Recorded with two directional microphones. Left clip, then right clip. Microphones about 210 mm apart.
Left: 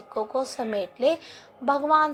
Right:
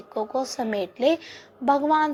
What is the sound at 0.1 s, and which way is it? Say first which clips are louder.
A woman's voice: even; 20° right (ahead or behind).